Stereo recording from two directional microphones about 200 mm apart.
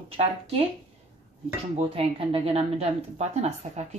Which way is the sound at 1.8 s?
30° right (ahead or behind).